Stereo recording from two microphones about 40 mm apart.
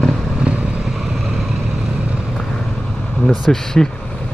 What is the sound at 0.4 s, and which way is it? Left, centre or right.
Vehicle, right.